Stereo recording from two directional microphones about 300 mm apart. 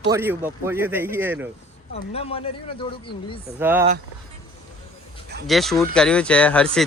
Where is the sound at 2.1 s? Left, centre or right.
Centre.